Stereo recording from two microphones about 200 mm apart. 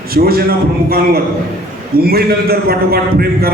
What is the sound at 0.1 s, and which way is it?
Speech, 50° right (ahead or behind).